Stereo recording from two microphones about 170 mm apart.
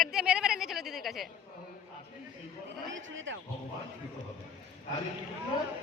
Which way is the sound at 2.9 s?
90° right.